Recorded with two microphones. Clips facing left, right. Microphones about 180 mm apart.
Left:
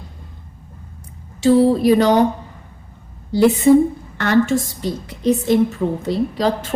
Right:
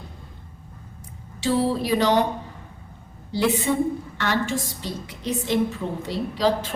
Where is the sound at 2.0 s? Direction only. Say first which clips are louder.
Left 6 dB; 50° left (ahead or behind).